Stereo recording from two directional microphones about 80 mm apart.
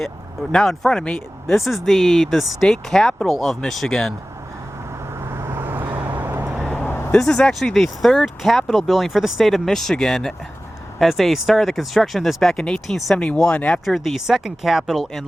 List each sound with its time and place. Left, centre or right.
0.5 s speech: centre
5.3 s vehicle: right
6.6 s a sound: centre
6.8 s vehicle: left
7.1 s speech: centre
13.8 s speech: centre